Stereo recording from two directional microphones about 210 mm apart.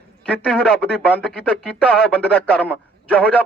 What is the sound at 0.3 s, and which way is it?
Speech, 5° left (ahead or behind).